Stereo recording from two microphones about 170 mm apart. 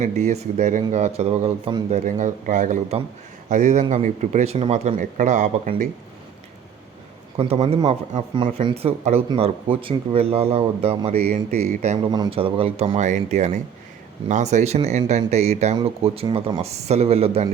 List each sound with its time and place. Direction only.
0.0 s speech: 45° right (ahead or behind)
2.0 s speech: 50° right (ahead or behind)
7.3 s speech: 35° right (ahead or behind)
12.1 s speech: 30° right (ahead or behind)